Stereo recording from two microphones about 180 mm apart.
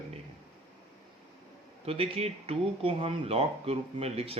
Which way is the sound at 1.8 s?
35° right (ahead or behind).